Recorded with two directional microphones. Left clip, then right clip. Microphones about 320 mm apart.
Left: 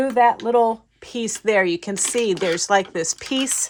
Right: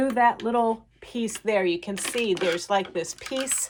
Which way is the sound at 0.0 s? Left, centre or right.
Left.